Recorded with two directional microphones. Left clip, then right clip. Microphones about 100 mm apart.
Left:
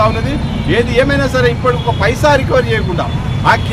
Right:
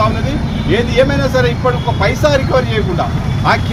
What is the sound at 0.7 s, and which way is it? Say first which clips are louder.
A man's voice: left 1 dB; 30° left (ahead or behind).